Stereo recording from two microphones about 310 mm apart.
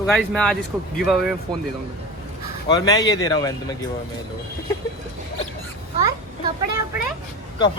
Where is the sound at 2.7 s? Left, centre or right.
Centre.